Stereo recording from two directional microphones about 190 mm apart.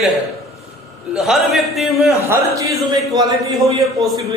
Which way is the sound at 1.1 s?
Centre (ahead or behind).